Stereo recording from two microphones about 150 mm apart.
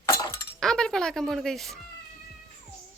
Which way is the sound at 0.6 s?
5° left (ahead or behind).